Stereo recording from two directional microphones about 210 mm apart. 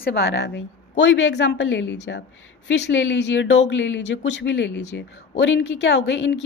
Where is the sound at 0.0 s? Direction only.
50° left (ahead or behind).